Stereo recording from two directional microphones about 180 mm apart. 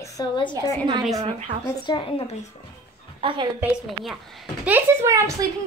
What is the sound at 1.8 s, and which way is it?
Speech, 25° left (ahead or behind).